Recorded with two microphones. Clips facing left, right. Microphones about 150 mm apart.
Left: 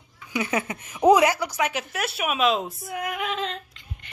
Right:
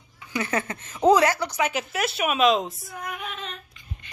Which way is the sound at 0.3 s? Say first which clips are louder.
Left 1 dB; 15° left (ahead or behind).